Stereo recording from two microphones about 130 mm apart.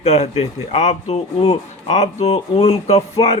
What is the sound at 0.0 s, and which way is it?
Speech, 55° left (ahead or behind).